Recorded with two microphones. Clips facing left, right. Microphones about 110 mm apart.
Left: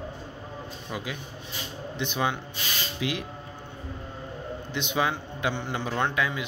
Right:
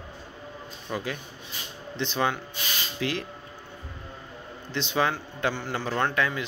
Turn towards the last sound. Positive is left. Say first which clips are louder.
# right 1 dB
turn(degrees=15)  # may be behind; listen again after turning